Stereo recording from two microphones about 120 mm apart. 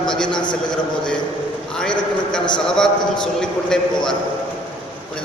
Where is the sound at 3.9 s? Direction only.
40° left (ahead or behind).